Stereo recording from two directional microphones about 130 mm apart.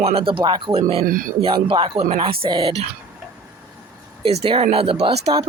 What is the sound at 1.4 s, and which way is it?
Speech, 40° right (ahead or behind).